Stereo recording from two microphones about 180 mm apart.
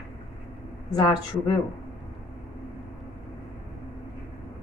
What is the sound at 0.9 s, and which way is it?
Speech, 20° left (ahead or behind).